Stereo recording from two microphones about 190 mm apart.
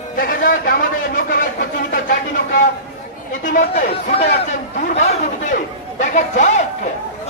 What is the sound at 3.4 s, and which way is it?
Speech, 45° left (ahead or behind).